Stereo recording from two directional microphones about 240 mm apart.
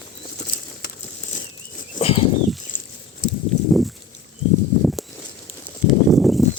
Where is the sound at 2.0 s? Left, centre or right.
Left.